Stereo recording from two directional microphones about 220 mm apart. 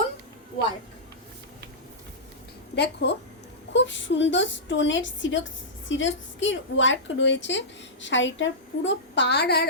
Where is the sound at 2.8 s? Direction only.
50° left (ahead or behind).